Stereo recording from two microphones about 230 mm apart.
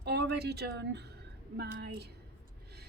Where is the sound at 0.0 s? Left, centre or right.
Right.